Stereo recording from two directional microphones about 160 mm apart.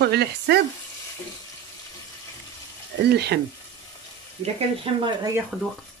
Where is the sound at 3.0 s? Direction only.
90° right.